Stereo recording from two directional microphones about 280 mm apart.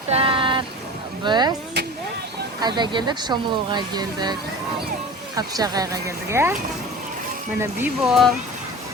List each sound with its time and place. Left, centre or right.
0.1 s a sound: centre
1.2 s speech: centre
2.6 s speech: centre
5.5 s speech: centre
7.6 s speech: centre